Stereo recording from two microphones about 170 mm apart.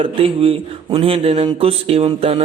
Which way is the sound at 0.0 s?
35° right (ahead or behind).